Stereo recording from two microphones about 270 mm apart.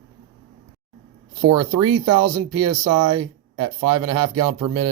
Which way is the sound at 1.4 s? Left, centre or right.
Right.